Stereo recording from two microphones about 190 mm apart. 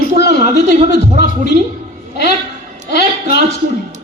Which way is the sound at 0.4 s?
40° right (ahead or behind).